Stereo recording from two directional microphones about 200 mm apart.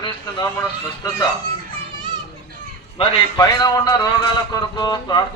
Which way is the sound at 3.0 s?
20° left (ahead or behind).